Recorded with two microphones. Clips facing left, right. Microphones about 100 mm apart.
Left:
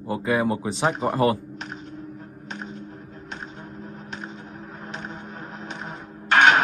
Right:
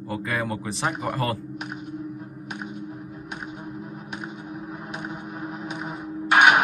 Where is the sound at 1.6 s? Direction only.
10° right (ahead or behind).